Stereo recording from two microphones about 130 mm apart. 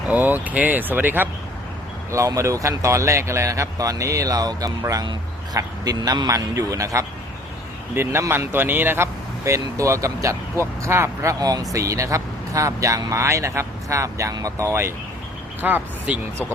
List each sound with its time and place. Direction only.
0.1 s speech: 15° right (ahead or behind)